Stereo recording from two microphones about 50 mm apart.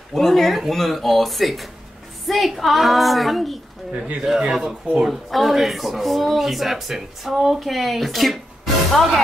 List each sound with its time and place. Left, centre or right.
0.1 s speech: centre